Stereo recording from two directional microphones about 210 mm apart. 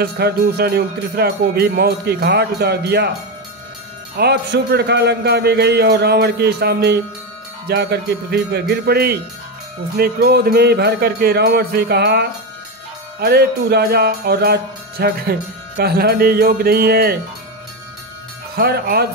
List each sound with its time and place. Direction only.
0.0 s music: 50° right (ahead or behind)
4.2 s music: 55° right (ahead or behind)
18.5 s music: 45° right (ahead or behind)